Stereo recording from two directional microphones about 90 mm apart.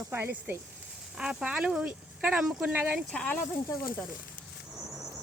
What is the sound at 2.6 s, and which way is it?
Speech, 20° right (ahead or behind).